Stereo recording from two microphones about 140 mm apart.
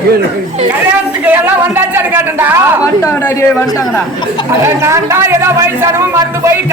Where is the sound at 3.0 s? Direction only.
15° left (ahead or behind).